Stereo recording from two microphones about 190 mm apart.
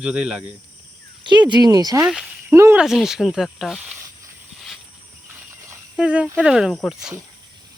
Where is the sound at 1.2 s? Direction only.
25° right (ahead or behind).